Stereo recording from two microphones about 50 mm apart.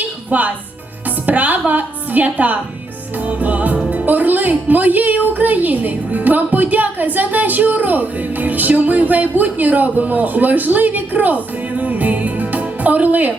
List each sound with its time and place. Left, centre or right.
0.3 s a woman's voice: right
11.8 s music: right